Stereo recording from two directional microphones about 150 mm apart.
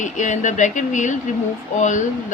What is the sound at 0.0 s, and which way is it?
Speech, 55° left (ahead or behind).